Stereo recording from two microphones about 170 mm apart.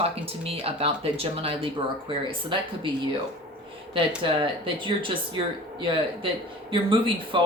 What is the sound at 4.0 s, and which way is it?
Speech, 30° right (ahead or behind).